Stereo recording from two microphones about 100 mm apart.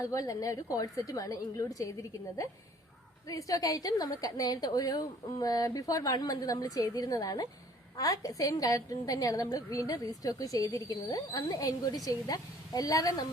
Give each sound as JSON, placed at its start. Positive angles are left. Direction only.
{"t": 0.0, "sound": "a woman's voice", "side_deg": 35}